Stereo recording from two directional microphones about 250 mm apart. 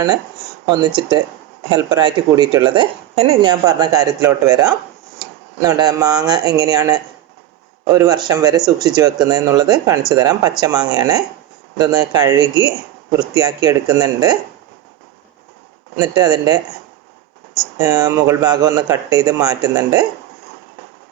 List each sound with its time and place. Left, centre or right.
0.7 s speech: centre
16.0 s speech: centre
17.7 s speech: centre